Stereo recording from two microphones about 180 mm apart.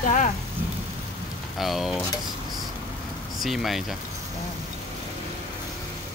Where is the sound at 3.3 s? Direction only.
Centre (ahead or behind).